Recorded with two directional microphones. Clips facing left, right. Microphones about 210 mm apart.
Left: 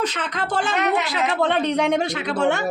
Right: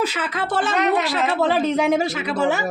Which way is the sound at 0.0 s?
5° right (ahead or behind).